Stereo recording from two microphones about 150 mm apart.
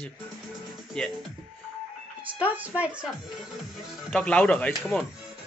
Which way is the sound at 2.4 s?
10° right (ahead or behind).